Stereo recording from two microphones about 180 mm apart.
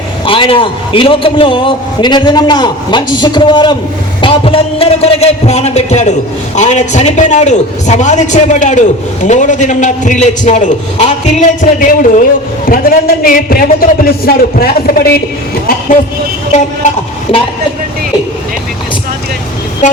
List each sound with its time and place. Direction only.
0.3 s a man's voice: 30° left (ahead or behind); by 15.2 s 55° left (ahead or behind)
19.8 s vehicle: 40° left (ahead or behind)